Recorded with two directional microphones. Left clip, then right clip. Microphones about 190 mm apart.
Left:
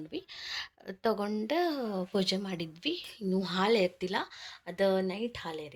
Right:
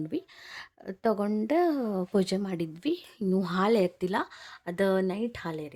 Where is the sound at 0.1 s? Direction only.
40° right (ahead or behind).